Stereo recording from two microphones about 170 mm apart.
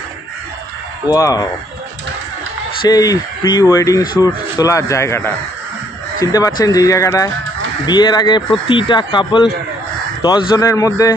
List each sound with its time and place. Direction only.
1.0 s speech: 20° left (ahead or behind)
2.8 s speech: 20° left (ahead or behind)